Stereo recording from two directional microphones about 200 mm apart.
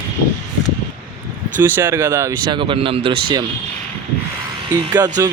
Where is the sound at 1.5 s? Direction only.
10° right (ahead or behind).